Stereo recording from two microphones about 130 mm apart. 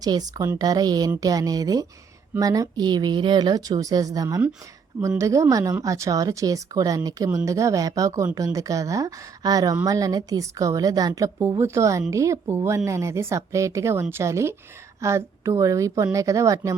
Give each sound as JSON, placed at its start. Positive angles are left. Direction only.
{"t": 0.0, "sound": "a woman's voice", "side_deg": -30}